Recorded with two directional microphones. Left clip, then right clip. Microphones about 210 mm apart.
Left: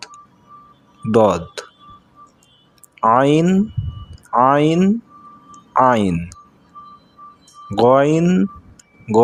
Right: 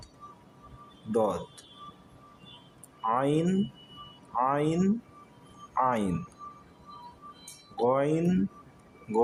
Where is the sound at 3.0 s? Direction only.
45° left (ahead or behind).